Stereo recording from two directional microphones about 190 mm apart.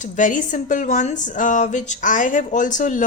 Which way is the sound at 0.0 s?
40° left (ahead or behind).